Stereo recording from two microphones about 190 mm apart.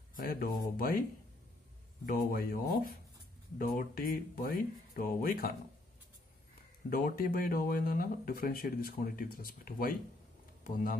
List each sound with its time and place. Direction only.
0.1 s speech: 50° left (ahead or behind)
2.0 s speech: 50° left (ahead or behind)
6.9 s speech: 50° left (ahead or behind)